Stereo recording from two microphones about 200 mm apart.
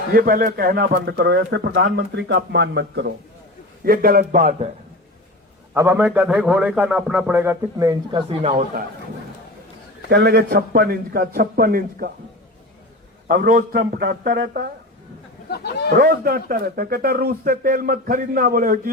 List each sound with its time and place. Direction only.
0.1 s a man's voice: 45° right (ahead or behind)
3.8 s speech: 45° right (ahead or behind)
5.7 s a man's voice: 15° right (ahead or behind); by 8.6 s 30° right (ahead or behind)
10.1 s speech: 55° right (ahead or behind)
13.2 s speech: 45° right (ahead or behind)
15.4 s speech: 55° left (ahead or behind)
16.0 s speech: 45° right (ahead or behind)